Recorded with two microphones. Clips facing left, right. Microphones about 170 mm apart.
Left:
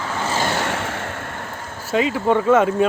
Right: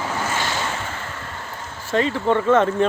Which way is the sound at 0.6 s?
75° left (ahead or behind).